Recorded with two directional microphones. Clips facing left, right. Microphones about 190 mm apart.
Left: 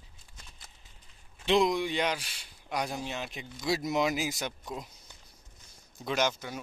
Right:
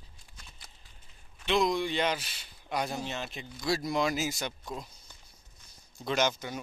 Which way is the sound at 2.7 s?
Centre (ahead or behind).